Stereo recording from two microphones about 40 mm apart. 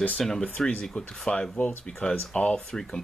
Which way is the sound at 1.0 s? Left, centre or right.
Left.